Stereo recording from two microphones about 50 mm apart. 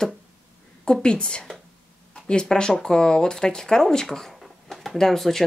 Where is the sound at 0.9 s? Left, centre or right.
Centre.